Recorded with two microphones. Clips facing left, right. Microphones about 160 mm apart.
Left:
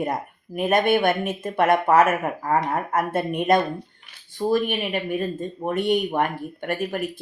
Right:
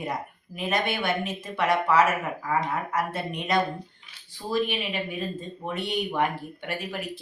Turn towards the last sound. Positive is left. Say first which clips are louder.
# left 7 dB
turn(degrees=50)  # may be behind; listen again after turning